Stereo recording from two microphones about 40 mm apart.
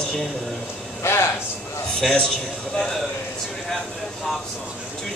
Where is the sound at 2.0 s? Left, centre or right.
Centre.